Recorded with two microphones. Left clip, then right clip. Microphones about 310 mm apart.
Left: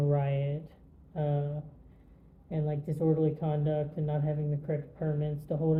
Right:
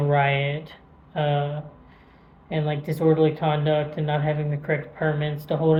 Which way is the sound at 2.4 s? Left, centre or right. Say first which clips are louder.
Right 9 dB; right.